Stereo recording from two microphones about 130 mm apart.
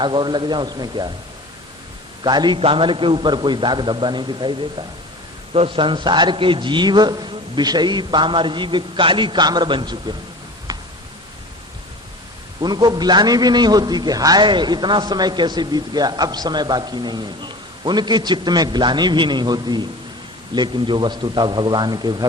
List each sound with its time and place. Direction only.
0.0 s a man's voice: 35° right (ahead or behind)
2.2 s a man's voice: 35° right (ahead or behind)
5.5 s a man's voice: 40° right (ahead or behind)
12.5 s a man's voice: 30° right (ahead or behind)